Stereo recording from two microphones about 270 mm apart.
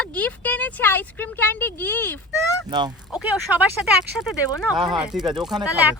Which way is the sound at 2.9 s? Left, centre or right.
Centre.